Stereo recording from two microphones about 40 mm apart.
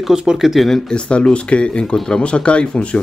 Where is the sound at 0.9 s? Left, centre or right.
Left.